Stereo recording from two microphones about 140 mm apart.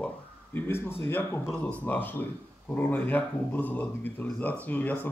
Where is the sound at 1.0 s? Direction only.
20° left (ahead or behind).